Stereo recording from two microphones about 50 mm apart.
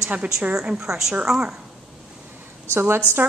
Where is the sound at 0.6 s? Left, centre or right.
Centre.